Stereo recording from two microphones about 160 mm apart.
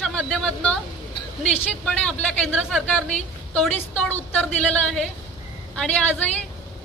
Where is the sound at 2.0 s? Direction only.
5° left (ahead or behind).